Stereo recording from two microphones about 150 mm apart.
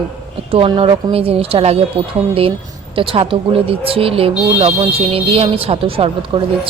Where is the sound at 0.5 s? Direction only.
40° right (ahead or behind).